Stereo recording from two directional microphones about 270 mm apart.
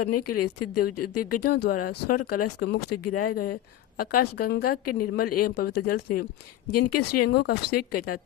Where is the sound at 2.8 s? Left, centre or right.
Left.